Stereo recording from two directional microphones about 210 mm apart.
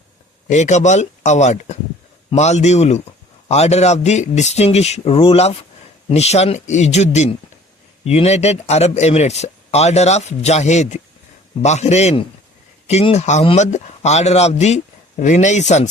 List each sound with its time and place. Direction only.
0.4 s speech: 35° left (ahead or behind)